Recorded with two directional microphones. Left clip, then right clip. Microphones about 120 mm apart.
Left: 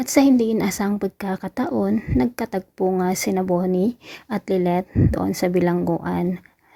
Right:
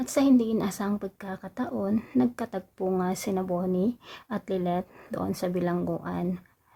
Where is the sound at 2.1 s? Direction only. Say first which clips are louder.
Left 4 dB; 30° left (ahead or behind).